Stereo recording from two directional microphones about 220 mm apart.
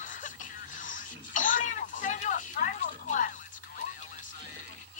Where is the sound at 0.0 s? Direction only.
35° left (ahead or behind).